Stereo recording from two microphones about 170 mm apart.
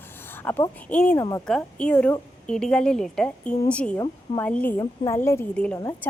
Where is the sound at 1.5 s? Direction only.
5° left (ahead or behind).